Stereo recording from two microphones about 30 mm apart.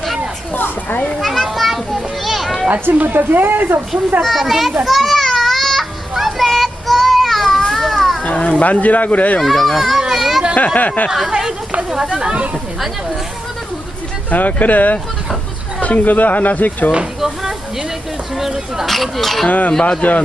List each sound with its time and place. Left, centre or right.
0.5 s a sound: left
1.2 s children playing: centre
2.9 s a woman's voice: right
4.2 s speech: centre
4.9 s children playing: centre
8.2 s speech: left
9.4 s speech: centre
10.2 s children playing: centre
10.8 s speech: left
11.3 s chatter: right
14.3 s speech: left
17.2 s a sound: centre
18.9 s speech: centre
19.5 s speech: left